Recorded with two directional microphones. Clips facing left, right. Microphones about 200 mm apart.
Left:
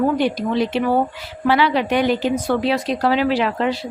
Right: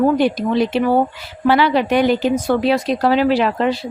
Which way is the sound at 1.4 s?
45° right (ahead or behind).